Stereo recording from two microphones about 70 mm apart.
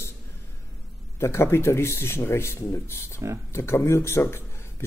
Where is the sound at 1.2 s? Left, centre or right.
Left.